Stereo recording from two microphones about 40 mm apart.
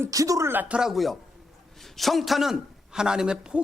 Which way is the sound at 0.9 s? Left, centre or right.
Centre.